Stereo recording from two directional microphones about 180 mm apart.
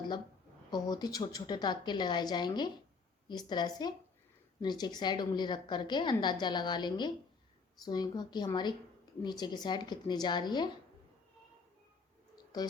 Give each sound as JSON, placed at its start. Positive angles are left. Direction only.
{"t": 0.7, "sound": "a woman's voice", "side_deg": 20}